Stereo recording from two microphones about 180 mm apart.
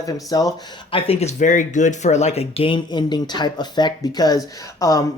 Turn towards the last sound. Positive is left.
turn(degrees=20)  # may be behind; listen again after turning